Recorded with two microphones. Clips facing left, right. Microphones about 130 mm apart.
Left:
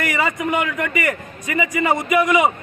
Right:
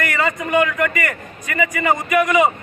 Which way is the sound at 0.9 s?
15° left (ahead or behind).